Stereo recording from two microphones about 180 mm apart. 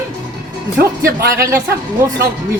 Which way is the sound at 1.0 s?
55° right (ahead or behind).